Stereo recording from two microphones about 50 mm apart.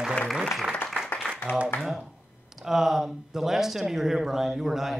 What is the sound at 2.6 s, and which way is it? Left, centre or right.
A woman's voice, centre.